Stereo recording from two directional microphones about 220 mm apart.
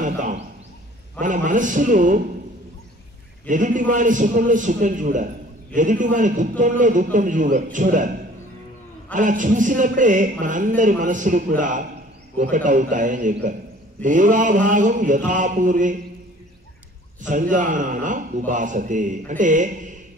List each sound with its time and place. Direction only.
0.0 s a sound: 35° right (ahead or behind)
1.2 s a man's voice: 35° right (ahead or behind)
3.4 s a man's voice: 35° right (ahead or behind)
9.1 s a man's voice: 35° right (ahead or behind)
17.2 s a man's voice: 35° right (ahead or behind)